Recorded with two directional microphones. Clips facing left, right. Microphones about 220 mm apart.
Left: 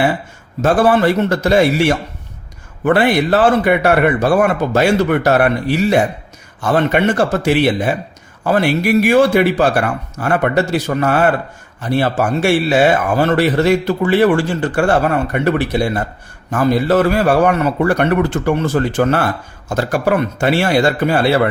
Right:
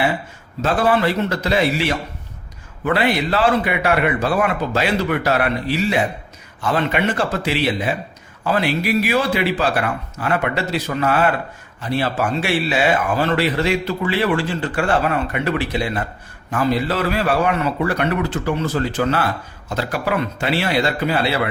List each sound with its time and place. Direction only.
0.6 s speech: 50° left (ahead or behind)